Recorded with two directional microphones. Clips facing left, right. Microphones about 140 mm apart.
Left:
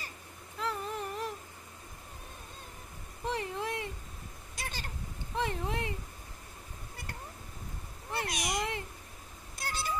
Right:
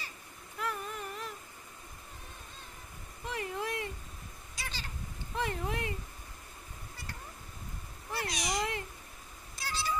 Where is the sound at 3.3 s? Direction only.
25° left (ahead or behind).